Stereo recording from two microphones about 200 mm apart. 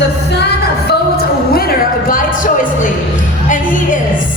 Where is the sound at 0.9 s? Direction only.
50° left (ahead or behind).